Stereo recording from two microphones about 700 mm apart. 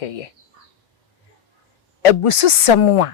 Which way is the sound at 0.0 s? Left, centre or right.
Left.